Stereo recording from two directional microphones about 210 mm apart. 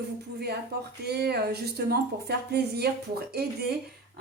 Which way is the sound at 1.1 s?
50° right (ahead or behind).